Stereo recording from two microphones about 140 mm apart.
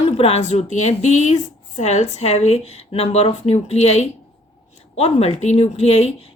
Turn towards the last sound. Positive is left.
turn(degrees=50)  # may be behind; listen again after turning